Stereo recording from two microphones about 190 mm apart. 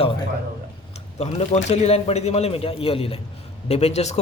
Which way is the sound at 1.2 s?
35° left (ahead or behind).